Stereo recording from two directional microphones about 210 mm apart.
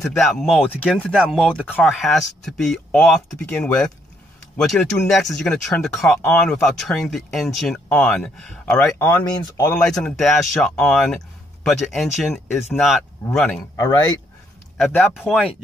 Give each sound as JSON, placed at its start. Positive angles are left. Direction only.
{"t": 0.2, "sound": "speech", "side_deg": 0}
{"t": 9.8, "sound": "speech", "side_deg": 0}
{"t": 14.8, "sound": "speech", "side_deg": 5}